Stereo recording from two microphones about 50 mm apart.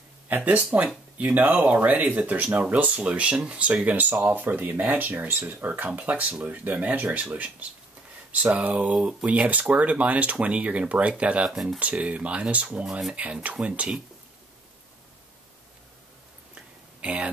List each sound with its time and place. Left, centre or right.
0.7 s speech: right
1.1 s speech: right
8.5 s speech: right
11.4 s speech: centre
11.8 s speech: right
17.0 s speech: right